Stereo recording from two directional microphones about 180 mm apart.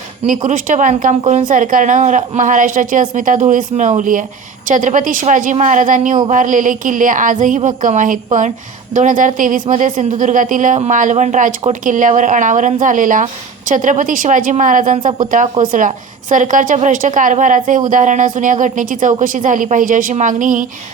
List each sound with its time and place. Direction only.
0.3 s a woman's voice: 45° right (ahead or behind)